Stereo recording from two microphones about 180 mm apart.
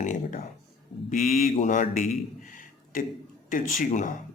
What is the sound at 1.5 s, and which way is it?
A man's voice, 45° left (ahead or behind).